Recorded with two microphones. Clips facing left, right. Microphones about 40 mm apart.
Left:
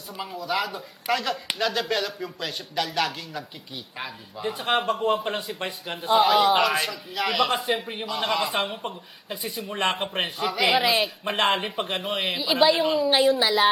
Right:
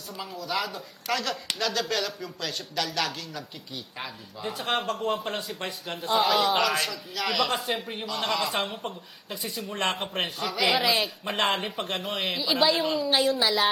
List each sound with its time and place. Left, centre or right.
0.1 s a man's voice: centre